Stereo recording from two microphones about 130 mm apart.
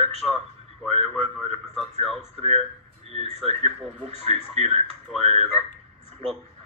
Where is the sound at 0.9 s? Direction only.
50° right (ahead or behind).